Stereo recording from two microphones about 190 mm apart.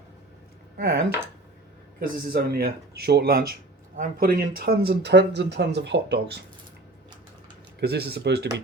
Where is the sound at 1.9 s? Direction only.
55° right (ahead or behind).